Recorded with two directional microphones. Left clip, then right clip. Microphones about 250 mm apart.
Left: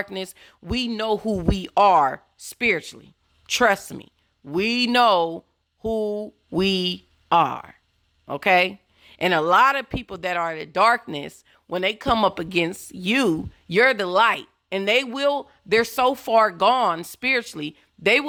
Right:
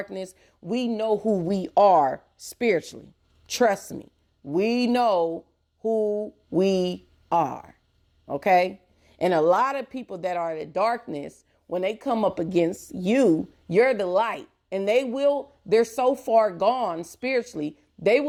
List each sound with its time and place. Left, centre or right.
0.0 s speech: centre